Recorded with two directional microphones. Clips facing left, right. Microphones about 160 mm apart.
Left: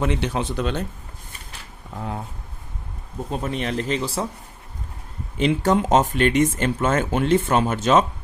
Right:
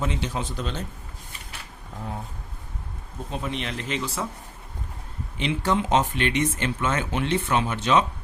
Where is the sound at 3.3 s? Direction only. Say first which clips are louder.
Left 5 dB; 40° left (ahead or behind).